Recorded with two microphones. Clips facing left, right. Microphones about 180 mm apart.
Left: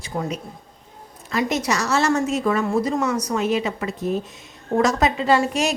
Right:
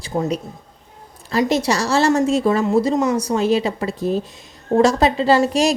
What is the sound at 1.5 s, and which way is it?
Speech, 30° right (ahead or behind).